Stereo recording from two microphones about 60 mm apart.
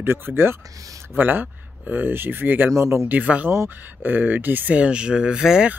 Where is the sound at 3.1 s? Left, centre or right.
Right.